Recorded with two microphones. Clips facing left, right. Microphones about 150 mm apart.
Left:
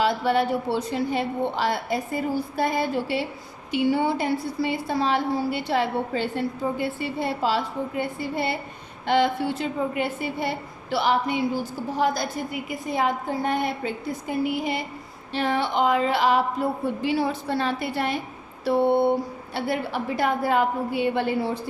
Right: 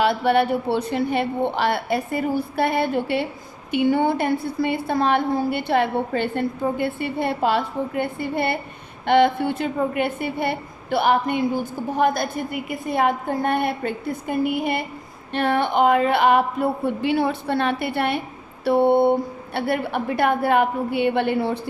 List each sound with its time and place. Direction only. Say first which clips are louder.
0.0 s a woman's voice: right 3 dB; 65° right (ahead or behind)